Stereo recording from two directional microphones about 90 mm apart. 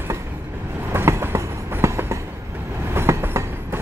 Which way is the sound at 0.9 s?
25° right (ahead or behind).